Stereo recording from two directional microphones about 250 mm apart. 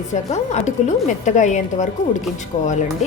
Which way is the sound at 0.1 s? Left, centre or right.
Left.